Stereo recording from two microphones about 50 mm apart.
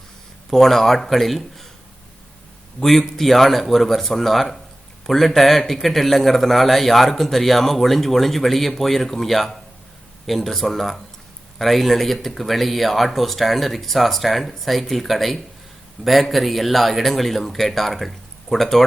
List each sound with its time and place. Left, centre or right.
0.5 s a man's voice: centre
2.8 s a man's voice: centre